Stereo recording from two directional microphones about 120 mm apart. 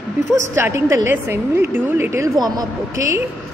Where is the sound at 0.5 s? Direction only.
20° right (ahead or behind).